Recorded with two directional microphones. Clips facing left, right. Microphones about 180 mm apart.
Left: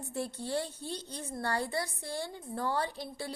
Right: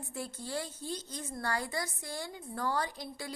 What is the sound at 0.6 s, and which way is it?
Speech, 65° left (ahead or behind).